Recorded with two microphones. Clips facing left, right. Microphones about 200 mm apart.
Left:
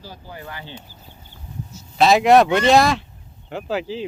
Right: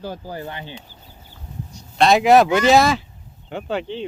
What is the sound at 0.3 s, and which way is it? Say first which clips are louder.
Speech: right 5 dB; 35° right (ahead or behind).